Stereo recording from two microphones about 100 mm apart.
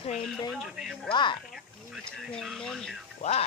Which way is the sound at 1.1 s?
50° left (ahead or behind).